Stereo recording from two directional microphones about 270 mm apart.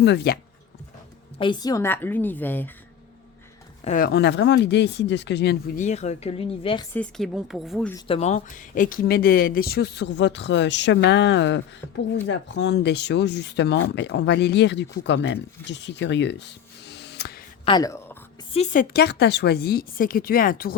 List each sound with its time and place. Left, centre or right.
0.0 s speech: left
1.4 s a woman's voice: centre
3.8 s speech: left
6.9 s speech: centre
7.9 s speech: centre; by 17.4 s left
17.7 s speech: centre
18.5 s speech: left